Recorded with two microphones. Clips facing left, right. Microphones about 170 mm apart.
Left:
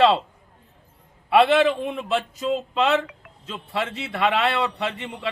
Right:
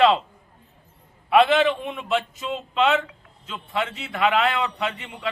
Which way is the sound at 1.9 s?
35° left (ahead or behind).